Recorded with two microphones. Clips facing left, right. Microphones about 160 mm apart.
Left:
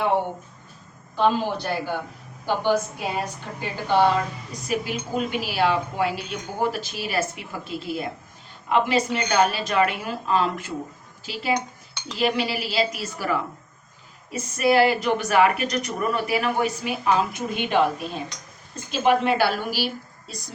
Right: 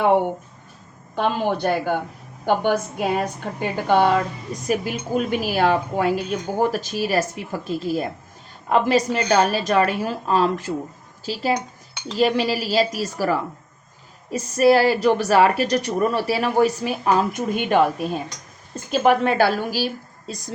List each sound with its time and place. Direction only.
1.1 s a woman's voice: 55° right (ahead or behind)